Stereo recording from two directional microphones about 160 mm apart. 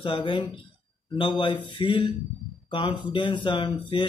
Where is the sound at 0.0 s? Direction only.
30° left (ahead or behind).